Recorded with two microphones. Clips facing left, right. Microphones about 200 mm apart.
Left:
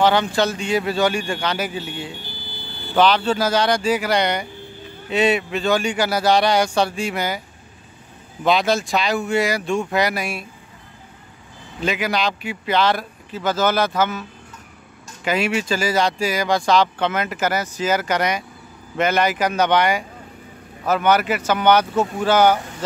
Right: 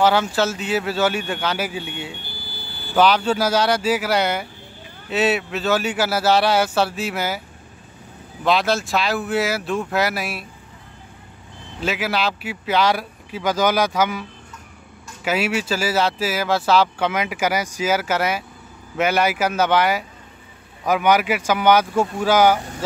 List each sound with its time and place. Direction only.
0.0 s speech: 5° right (ahead or behind)
2.9 s speech: 10° right (ahead or behind)
8.5 s speech: centre (ahead or behind)
11.8 s speech: 5° right (ahead or behind)
15.2 s speech: 5° right (ahead or behind)